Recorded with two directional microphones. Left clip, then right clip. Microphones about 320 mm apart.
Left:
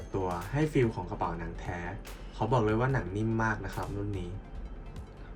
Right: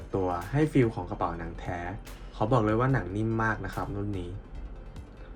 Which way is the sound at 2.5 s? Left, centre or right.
Centre.